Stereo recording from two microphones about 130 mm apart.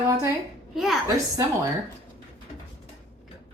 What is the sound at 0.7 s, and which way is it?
Speech, centre (ahead or behind).